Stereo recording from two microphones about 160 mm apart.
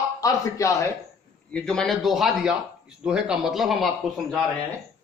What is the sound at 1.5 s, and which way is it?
A man's voice, 5° left (ahead or behind).